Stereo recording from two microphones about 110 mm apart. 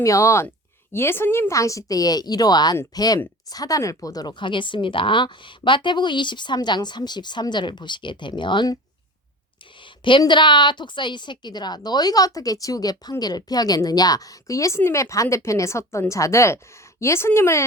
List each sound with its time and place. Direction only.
0.0 s a woman's voice: 30° left (ahead or behind)
9.8 s a woman's voice: 50° left (ahead or behind); by 17.7 s 25° left (ahead or behind)